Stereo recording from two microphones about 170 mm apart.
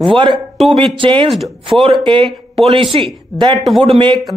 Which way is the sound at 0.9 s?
30° right (ahead or behind).